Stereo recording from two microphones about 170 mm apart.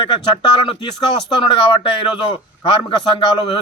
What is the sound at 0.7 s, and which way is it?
A man's voice, 25° left (ahead or behind).